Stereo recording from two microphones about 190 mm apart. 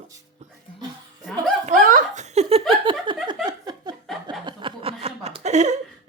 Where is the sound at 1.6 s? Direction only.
45° right (ahead or behind).